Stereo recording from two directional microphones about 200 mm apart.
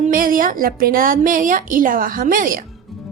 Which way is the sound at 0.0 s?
45° right (ahead or behind).